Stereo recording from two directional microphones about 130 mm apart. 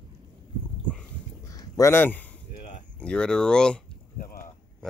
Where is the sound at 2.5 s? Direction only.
60° left (ahead or behind).